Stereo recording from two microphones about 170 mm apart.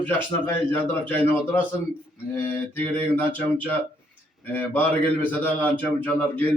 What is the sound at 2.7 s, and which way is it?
A man's voice, 10° left (ahead or behind).